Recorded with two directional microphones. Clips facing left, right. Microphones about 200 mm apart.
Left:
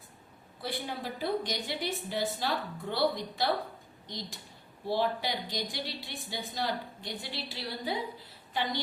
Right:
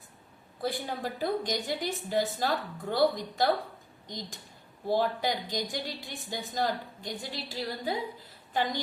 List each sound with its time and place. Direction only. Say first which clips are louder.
0.6 s a woman's voice: right 4 dB; 45° right (ahead or behind)